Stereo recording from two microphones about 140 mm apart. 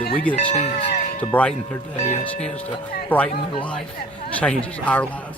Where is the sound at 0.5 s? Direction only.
50° left (ahead or behind).